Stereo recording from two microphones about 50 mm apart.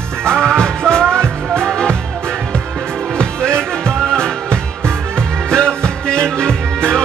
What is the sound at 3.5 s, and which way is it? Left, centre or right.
Music, centre.